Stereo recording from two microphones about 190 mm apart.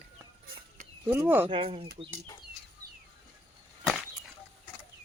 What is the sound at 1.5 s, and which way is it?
Speech, 30° right (ahead or behind).